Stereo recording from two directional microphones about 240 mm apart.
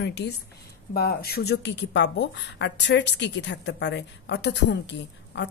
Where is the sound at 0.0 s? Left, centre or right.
Left.